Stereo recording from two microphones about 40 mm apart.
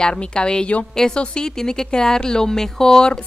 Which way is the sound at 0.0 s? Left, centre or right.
Left.